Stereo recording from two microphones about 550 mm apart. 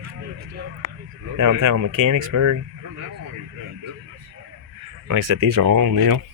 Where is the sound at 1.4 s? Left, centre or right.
Right.